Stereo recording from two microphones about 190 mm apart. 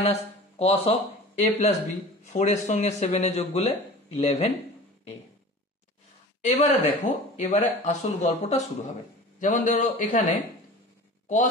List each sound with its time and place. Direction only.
0.0 s speech: 35° left (ahead or behind)
6.4 s speech: 35° left (ahead or behind)